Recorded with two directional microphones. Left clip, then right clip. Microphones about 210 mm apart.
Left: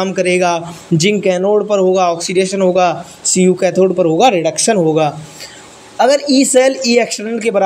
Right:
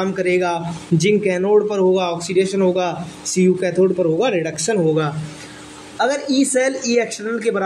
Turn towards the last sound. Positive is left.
turn(degrees=25)  # may be behind; listen again after turning